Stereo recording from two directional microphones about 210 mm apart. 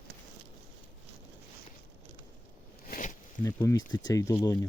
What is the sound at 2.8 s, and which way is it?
Zipper, 40° left (ahead or behind).